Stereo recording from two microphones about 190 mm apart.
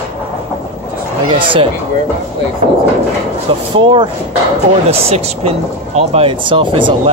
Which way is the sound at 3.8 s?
25° right (ahead or behind).